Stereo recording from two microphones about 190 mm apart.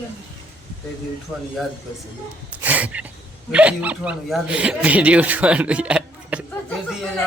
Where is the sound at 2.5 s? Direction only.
10° right (ahead or behind).